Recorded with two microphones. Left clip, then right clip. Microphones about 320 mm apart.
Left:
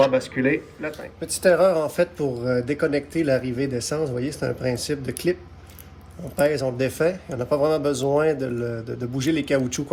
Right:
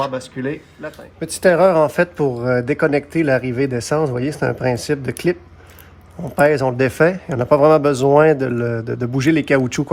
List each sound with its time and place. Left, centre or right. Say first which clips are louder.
0.0 s speech: left 3 dB; right
1.2 s speech: right 4 dB; right